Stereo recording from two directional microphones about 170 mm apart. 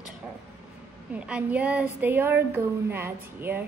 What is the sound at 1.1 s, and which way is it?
A woman's voice, 5° right (ahead or behind).